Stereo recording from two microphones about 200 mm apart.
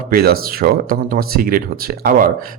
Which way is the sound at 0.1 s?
50° right (ahead or behind).